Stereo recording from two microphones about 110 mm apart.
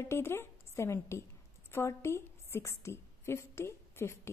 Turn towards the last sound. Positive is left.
turn(degrees=25)  # may be behind; listen again after turning